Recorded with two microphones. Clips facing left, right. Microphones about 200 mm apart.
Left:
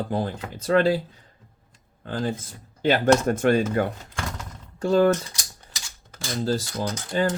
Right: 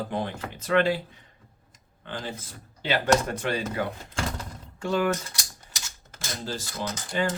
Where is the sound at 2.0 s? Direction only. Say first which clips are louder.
Left 8 dB; 40° left (ahead or behind).